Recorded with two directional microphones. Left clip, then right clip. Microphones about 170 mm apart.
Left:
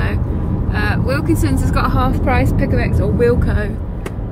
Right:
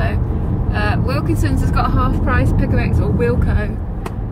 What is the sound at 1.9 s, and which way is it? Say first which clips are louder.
Speech: left 2 dB; 15° left (ahead or behind).